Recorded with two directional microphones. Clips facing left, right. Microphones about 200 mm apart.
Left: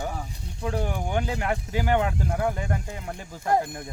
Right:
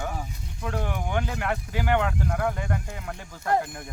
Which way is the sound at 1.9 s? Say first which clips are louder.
Even; 10° left (ahead or behind).